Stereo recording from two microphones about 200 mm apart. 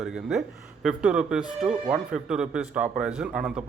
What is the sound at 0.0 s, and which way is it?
Speech, centre (ahead or behind).